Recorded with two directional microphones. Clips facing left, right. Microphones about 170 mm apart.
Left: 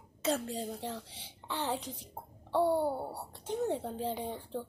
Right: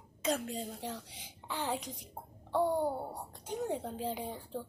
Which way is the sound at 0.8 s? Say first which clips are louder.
Left 2 dB; 10° right (ahead or behind).